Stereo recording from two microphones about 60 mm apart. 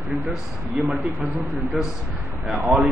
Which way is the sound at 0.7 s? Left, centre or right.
Centre.